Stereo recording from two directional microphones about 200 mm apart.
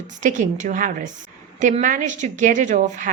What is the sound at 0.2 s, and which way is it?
A woman's voice, 40° right (ahead or behind).